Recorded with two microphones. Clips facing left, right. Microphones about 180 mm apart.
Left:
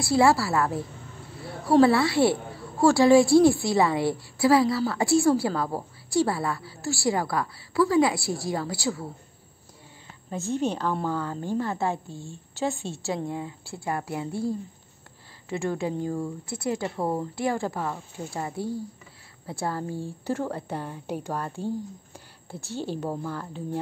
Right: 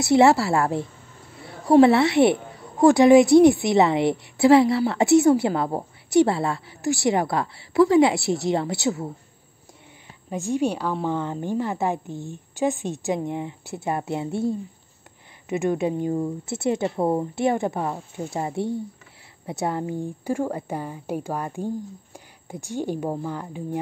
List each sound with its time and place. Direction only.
0.0 s a woman's voice: 20° right (ahead or behind)
10.3 s speech: 15° right (ahead or behind)
11.1 s a woman's voice: 20° right (ahead or behind)